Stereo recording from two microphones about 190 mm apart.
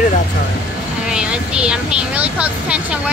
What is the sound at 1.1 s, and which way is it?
Speech, 5° right (ahead or behind).